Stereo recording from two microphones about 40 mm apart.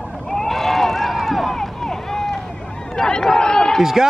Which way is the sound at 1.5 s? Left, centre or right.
Centre.